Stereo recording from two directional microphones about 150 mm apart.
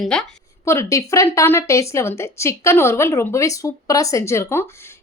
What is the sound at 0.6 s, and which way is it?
A woman's voice, 20° left (ahead or behind).